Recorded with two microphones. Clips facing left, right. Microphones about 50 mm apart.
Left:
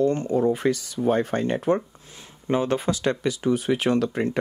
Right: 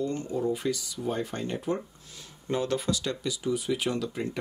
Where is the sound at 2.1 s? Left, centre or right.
Left.